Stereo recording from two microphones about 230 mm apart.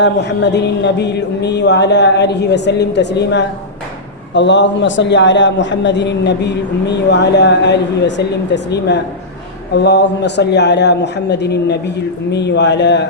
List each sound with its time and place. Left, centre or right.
0.0 s a man's voice: left